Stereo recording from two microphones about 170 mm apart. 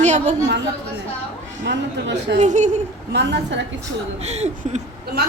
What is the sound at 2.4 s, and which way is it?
Speech, 45° right (ahead or behind).